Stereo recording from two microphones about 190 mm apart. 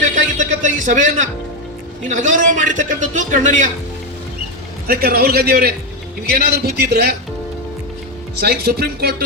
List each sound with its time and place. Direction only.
0.3 s music: 40° right (ahead or behind)
2.0 s a man's voice: 40° right (ahead or behind)
4.9 s a man's voice: 55° right (ahead or behind)
8.4 s a man's voice: 55° right (ahead or behind)